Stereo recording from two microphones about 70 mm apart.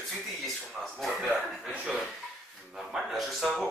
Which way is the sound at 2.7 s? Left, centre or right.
Centre.